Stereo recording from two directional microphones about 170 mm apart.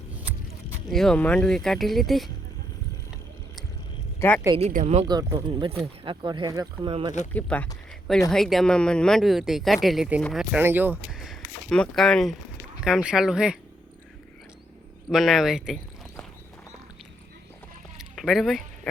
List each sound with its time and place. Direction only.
0.9 s speech: centre (ahead or behind)
4.2 s speech: 15° left (ahead or behind)
4.7 s speech: 40° right (ahead or behind)
5.0 s speech: 25° right (ahead or behind)
7.3 s speech: 10° left (ahead or behind)
15.1 s speech: centre (ahead or behind)
17.9 s rowboat: centre (ahead or behind)